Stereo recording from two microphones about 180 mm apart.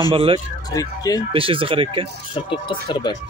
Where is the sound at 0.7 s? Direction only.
20° left (ahead or behind).